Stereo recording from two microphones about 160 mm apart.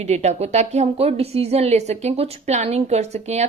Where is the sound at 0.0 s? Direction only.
45° right (ahead or behind).